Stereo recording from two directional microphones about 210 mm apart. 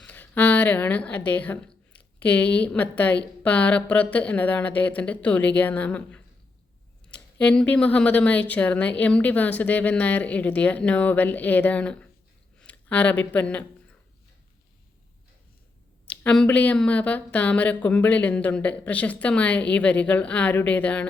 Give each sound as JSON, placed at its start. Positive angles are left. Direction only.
{"t": 0.0, "sound": "speech", "side_deg": 10}
{"t": 16.0, "sound": "speech", "side_deg": 5}